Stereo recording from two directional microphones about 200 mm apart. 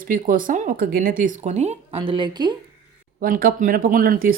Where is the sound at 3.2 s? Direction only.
45° right (ahead or behind).